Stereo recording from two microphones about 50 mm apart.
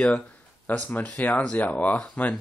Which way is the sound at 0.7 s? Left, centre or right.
Left.